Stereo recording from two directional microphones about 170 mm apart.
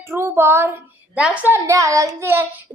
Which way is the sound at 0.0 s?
15° right (ahead or behind).